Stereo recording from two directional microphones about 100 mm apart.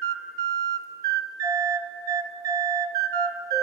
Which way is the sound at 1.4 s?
35° right (ahead or behind).